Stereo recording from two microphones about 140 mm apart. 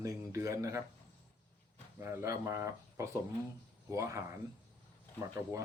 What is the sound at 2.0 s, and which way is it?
Speech, 20° right (ahead or behind).